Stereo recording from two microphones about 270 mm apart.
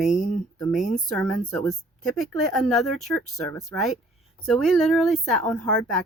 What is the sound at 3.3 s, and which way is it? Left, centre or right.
Speech, centre.